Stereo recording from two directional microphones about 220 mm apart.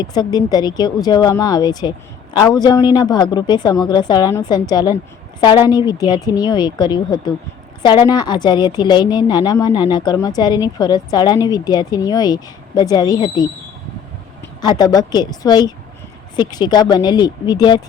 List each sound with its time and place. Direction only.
0.0 s a woman's voice: 20° left (ahead or behind)
14.6 s a woman's voice: 15° left (ahead or behind)